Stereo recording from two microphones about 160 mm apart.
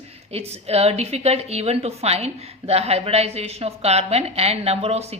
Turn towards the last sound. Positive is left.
turn(degrees=-40)  # may be behind; listen again after turning